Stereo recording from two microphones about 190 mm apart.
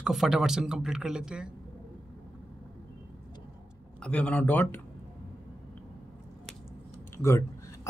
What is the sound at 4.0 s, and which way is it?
Speech, 5° left (ahead or behind).